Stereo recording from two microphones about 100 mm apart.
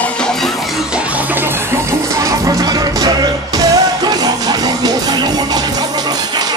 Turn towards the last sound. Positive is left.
turn(degrees=-40)  # may be behind; listen again after turning